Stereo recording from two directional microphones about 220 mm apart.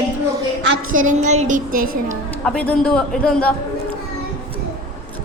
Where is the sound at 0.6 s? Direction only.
60° right (ahead or behind).